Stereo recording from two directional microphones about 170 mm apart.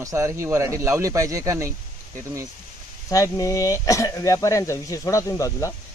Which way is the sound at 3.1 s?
20° left (ahead or behind).